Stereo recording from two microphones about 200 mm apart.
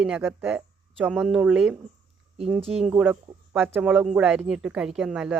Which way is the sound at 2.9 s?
10° right (ahead or behind).